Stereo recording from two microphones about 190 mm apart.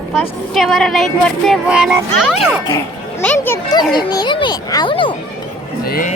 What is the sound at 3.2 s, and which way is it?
A child's voice, 10° left (ahead or behind).